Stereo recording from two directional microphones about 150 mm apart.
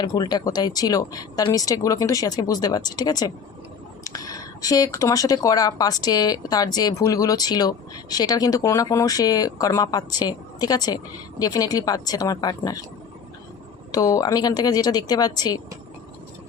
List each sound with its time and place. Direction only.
0.0 s speech: 25° left (ahead or behind)
13.9 s speech: 25° left (ahead or behind)